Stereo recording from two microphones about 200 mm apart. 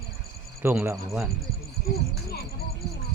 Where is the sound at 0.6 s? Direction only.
10° right (ahead or behind).